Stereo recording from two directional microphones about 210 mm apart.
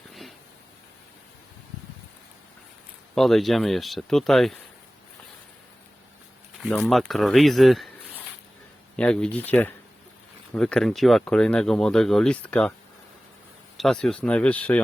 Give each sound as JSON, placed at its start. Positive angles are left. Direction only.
{"t": 0.1, "sound": "a sound", "side_deg": 0}
{"t": 3.2, "sound": "speech", "side_deg": 0}
{"t": 6.6, "sound": "speech", "side_deg": 0}
{"t": 13.7, "sound": "speech", "side_deg": 0}